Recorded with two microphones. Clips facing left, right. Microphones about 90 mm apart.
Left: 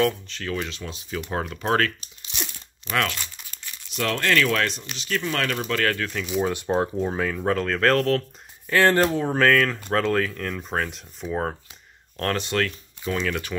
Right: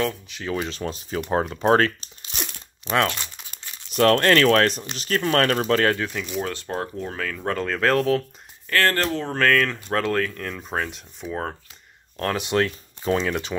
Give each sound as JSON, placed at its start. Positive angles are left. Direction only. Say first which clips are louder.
{"t": 0.3, "sound": "speech", "louder": "right 2 dB", "side_deg": -20}
{"t": 0.6, "sound": "speech", "louder": "right 4 dB", "side_deg": -40}
{"t": 1.3, "sound": "speech", "louder": "right 5 dB", "side_deg": -35}
{"t": 2.3, "sound": "crumpling", "louder": "right 1 dB", "side_deg": -45}
{"t": 2.8, "sound": "crumpling", "louder": "right 3 dB", "side_deg": -30}
{"t": 3.9, "sound": "speech", "louder": "right 6 dB", "side_deg": -50}
{"t": 6.2, "sound": "speech", "louder": "left 3 dB", "side_deg": 5}
{"t": 6.5, "sound": "speech", "louder": "left 5 dB", "side_deg": 15}
{"t": 7.5, "sound": "speech", "louder": "right 1 dB", "side_deg": 0}
{"t": 8.6, "sound": "speech", "louder": "left 3 dB", "side_deg": 15}
{"t": 12.4, "sound": "speech", "louder": "right 3 dB", "side_deg": -20}